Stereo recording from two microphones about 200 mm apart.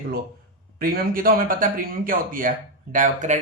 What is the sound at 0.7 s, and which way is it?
Speech, 45° right (ahead or behind).